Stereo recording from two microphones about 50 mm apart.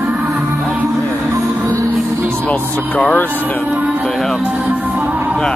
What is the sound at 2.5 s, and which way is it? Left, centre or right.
Speech, left.